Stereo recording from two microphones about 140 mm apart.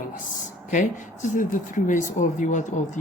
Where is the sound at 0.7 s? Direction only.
65° left (ahead or behind).